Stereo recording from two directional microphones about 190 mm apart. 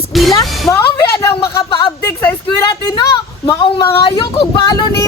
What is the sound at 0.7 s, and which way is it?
Speech, 15° left (ahead or behind).